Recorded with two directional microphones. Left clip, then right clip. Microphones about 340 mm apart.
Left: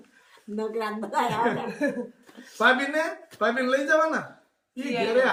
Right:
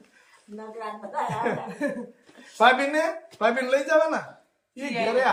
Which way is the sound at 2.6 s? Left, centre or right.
Centre.